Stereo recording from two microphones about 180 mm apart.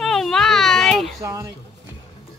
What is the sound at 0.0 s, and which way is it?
Baby cry, 5° left (ahead or behind).